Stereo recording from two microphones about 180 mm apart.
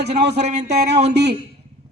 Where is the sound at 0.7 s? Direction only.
65° right (ahead or behind).